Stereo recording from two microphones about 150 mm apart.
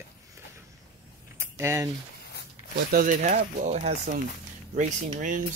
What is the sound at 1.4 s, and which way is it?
Mechanisms, 20° right (ahead or behind).